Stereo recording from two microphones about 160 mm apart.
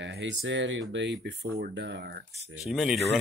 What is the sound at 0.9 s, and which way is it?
Speech, 90° right.